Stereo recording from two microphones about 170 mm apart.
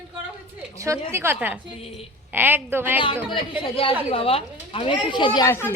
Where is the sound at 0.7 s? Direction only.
15° right (ahead or behind).